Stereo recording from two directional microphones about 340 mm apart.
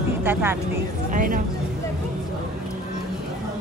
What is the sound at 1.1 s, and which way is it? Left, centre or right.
Speech, right.